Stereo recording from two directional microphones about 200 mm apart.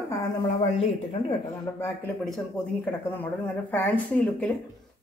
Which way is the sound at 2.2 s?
Centre (ahead or behind).